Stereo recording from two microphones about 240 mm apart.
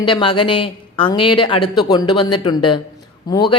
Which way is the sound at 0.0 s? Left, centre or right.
Centre.